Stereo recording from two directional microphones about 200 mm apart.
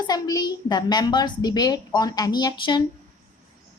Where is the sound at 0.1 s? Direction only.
20° left (ahead or behind).